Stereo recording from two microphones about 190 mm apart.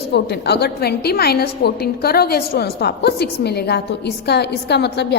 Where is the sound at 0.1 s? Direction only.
60° left (ahead or behind).